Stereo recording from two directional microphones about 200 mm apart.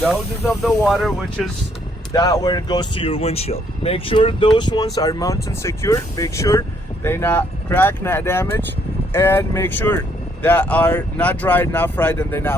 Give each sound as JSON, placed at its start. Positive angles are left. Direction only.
{"t": 0.6, "sound": "speech", "side_deg": 0}
{"t": 2.1, "sound": "speech", "side_deg": 20}